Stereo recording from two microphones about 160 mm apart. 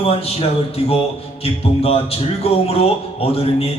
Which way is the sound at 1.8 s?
40° left (ahead or behind).